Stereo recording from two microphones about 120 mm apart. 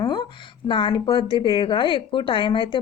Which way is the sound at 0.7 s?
45° left (ahead or behind).